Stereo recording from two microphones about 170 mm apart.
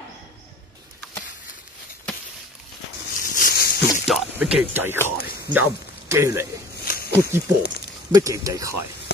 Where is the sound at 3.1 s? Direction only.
55° left (ahead or behind).